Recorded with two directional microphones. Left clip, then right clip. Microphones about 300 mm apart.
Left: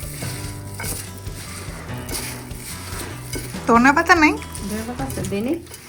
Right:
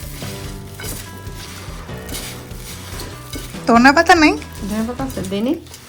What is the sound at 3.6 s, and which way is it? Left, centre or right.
Speech, centre.